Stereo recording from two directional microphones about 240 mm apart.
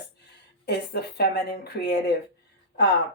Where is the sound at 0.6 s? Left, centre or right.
Left.